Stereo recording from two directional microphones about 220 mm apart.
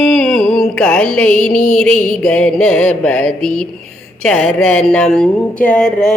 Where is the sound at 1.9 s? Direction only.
35° left (ahead or behind).